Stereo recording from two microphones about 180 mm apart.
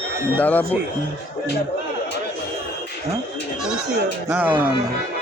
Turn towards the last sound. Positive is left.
turn(degrees=-10)  # may be behind; listen again after turning